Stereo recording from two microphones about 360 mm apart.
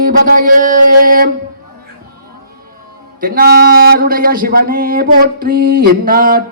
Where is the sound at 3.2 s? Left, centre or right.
Right.